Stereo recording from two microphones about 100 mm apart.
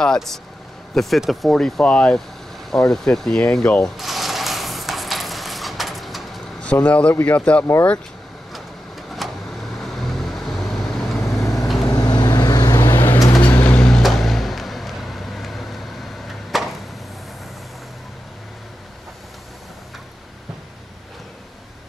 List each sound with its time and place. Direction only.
0.0 s speech: 5° left (ahead or behind)
2.7 s a sound: 5° left (ahead or behind)
6.6 s speech: 15° left (ahead or behind)
9.2 s vehicle: centre (ahead or behind)
11.9 s vehicle: 45° left (ahead or behind); by 16.6 s centre (ahead or behind)